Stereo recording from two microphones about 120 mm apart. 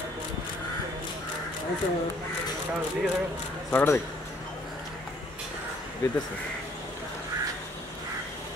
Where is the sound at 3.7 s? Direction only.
15° left (ahead or behind).